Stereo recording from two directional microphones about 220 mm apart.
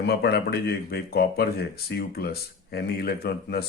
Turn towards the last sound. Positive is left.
turn(degrees=45)  # may be behind; listen again after turning